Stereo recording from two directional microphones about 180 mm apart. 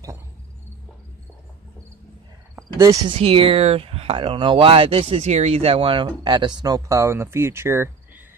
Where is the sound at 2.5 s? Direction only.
15° right (ahead or behind).